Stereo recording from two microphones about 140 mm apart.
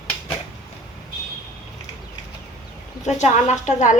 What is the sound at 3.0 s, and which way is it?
Speech, 55° left (ahead or behind).